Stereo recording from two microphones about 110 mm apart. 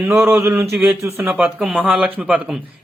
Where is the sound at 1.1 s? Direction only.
20° right (ahead or behind).